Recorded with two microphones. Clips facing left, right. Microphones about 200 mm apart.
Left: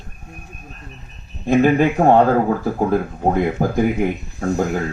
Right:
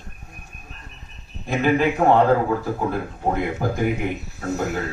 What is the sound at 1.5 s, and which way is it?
Speech, 45° left (ahead or behind).